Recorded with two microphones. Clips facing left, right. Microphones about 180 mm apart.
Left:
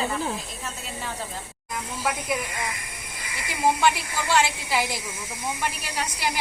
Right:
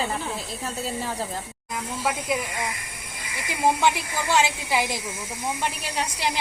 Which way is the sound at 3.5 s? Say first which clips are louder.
Even; 20° right (ahead or behind).